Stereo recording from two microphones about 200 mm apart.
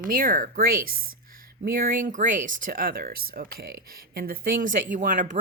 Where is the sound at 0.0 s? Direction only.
45° right (ahead or behind).